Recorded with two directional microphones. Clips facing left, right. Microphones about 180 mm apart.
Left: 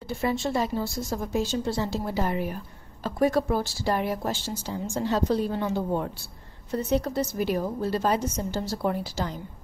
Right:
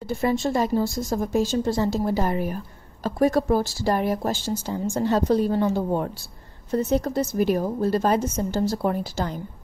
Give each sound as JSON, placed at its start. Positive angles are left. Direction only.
{"t": 0.2, "sound": "a woman's voice", "side_deg": -45}